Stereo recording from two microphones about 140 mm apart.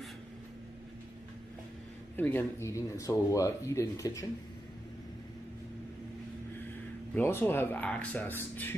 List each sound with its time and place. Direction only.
2.1 s speech: 15° left (ahead or behind)
7.2 s speech: 15° left (ahead or behind)